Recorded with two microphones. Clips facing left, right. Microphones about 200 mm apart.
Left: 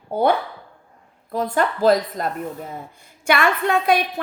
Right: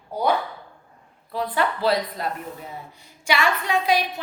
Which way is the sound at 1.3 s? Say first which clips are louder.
Left 3 dB; 45° left (ahead or behind).